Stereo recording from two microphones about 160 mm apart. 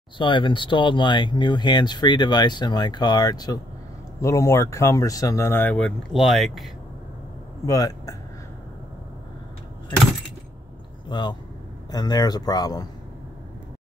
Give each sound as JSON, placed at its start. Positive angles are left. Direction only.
{"t": 0.2, "sound": "speech", "side_deg": 30}
{"t": 7.6, "sound": "speech", "side_deg": 20}
{"t": 11.1, "sound": "speech", "side_deg": 30}